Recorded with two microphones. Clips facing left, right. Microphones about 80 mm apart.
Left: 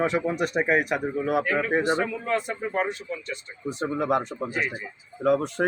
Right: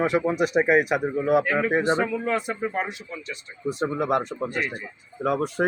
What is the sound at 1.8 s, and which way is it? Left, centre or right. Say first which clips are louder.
Speech: right 2 dB; right.